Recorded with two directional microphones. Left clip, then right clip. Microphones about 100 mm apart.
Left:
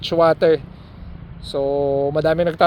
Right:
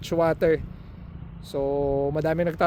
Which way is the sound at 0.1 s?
35° right (ahead or behind).